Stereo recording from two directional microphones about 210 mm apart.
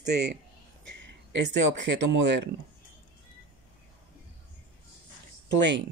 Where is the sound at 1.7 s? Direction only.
55° right (ahead or behind).